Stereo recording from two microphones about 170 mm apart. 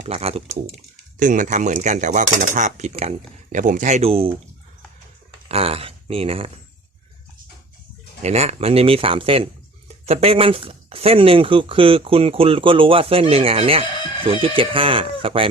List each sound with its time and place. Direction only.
0.0 s speech: 35° right (ahead or behind)
1.2 s cutlery: 50° right (ahead or behind)
5.5 s speech: 35° right (ahead or behind)
8.2 s speech: 40° right (ahead or behind)